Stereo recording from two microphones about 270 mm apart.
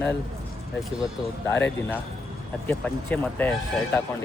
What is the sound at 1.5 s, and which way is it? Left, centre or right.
Speech, centre.